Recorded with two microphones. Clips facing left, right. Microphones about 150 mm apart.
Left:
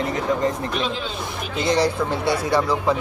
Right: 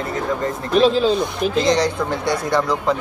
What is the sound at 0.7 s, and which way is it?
Speech, 35° right (ahead or behind).